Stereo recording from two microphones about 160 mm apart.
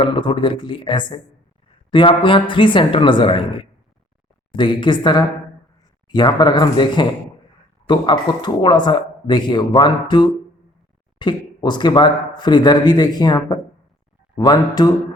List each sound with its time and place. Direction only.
0.0 s a man's voice: 30° left (ahead or behind)